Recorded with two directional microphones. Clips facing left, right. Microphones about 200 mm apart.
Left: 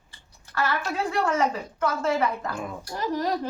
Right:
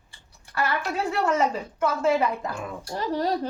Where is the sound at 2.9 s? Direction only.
30° right (ahead or behind).